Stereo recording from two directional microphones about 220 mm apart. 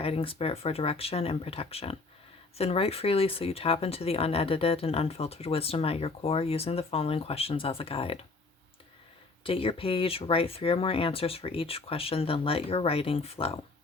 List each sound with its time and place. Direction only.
0.0 s speech: 25° left (ahead or behind)
9.4 s speech: 25° left (ahead or behind)